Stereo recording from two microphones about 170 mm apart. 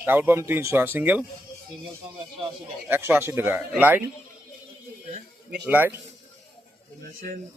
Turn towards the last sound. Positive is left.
turn(degrees=-10)  # may be behind; listen again after turning